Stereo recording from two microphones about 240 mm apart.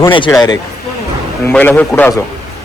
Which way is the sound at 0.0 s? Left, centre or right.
Centre.